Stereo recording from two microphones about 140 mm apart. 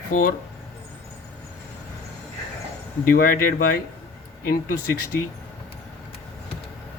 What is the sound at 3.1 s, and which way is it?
Speech, 90° left.